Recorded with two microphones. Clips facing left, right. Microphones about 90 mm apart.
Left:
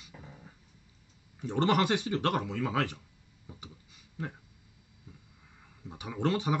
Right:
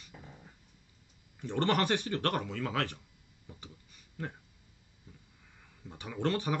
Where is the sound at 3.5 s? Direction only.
15° left (ahead or behind).